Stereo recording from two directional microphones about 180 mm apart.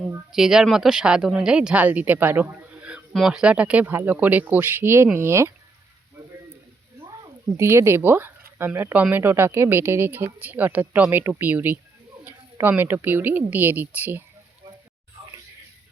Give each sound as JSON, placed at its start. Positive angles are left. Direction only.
{"t": 0.3, "sound": "speech", "side_deg": -5}
{"t": 7.0, "sound": "speech", "side_deg": -20}